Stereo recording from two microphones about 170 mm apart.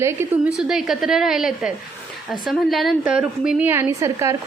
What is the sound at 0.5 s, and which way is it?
A woman's voice, centre (ahead or behind).